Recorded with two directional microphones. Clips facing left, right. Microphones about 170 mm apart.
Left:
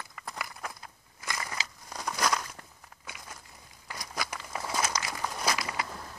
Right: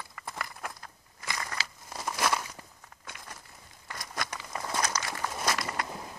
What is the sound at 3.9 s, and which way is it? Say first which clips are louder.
Walk: even; centre (ahead or behind).